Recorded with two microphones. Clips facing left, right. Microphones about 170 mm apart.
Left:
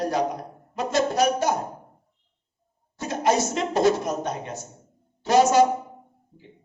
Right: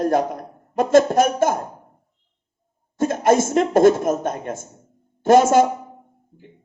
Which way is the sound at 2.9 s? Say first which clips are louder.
Right 6 dB; 50° right (ahead or behind).